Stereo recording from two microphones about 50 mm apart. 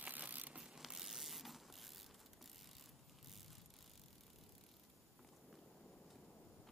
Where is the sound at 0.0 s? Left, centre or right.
Right.